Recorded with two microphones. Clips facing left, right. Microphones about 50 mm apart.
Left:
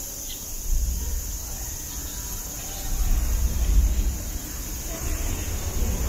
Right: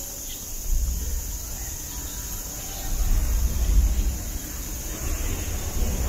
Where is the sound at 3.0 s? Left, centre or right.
Centre.